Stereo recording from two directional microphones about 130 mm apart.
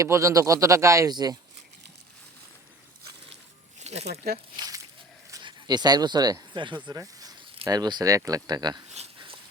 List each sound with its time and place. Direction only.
0.0 s speech: 25° right (ahead or behind)
3.8 s speech: 60° right (ahead or behind)
4.5 s squish: 30° right (ahead or behind)
5.3 s speech: 35° right (ahead or behind)
9.1 s a sound: 40° right (ahead or behind)